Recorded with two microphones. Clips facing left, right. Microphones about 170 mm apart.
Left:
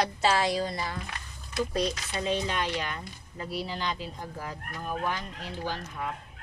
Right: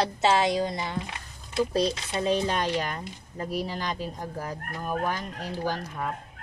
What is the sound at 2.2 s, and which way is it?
Speech, 40° right (ahead or behind).